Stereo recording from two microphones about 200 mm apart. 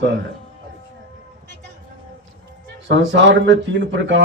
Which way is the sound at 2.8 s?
65° right (ahead or behind).